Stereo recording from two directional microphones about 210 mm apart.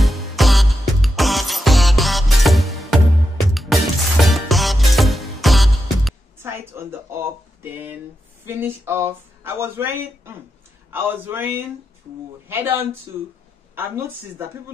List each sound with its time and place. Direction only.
0.0 s music: centre (ahead or behind)
6.4 s a sound: 10° right (ahead or behind)
8.5 s speech: 10° right (ahead or behind)